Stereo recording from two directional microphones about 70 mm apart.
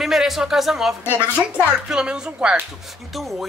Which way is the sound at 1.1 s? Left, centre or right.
Centre.